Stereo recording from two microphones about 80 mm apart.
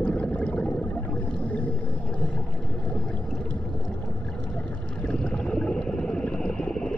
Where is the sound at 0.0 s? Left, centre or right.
Centre.